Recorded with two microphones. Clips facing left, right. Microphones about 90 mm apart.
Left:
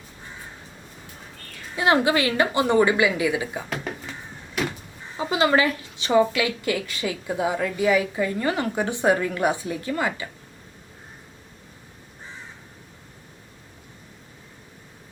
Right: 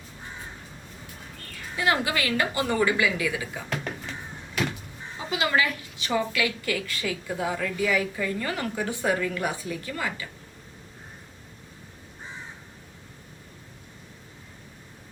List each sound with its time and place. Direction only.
1.7 s a woman's voice: 25° left (ahead or behind)
3.7 s music: 5° left (ahead or behind)
5.3 s a woman's voice: 35° left (ahead or behind)